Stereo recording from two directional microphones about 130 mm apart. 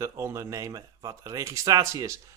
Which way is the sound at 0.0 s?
25° right (ahead or behind).